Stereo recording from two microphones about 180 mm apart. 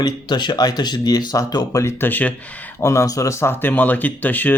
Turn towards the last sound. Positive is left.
turn(degrees=10)  # may be behind; listen again after turning